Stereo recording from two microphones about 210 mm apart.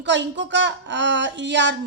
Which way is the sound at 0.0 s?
60° right (ahead or behind).